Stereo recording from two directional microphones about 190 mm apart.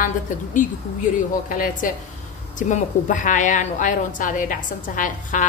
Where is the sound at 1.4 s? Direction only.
45° left (ahead or behind).